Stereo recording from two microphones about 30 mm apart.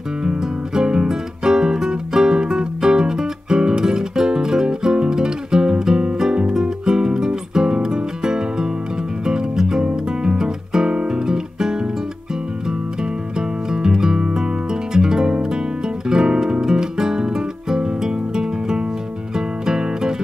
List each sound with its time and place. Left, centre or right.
0.7 s music: right
10.2 s guitar: right
13.7 s music: right